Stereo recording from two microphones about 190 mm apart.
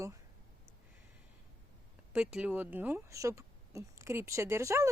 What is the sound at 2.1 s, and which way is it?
Speech, 5° right (ahead or behind).